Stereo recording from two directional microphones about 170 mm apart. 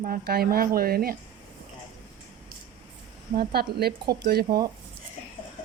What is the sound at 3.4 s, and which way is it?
Speech, 65° right (ahead or behind).